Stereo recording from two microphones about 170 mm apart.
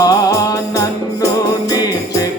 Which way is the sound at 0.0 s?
20° left (ahead or behind).